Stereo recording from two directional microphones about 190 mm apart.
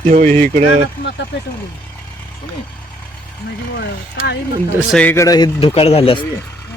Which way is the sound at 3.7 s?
60° left (ahead or behind).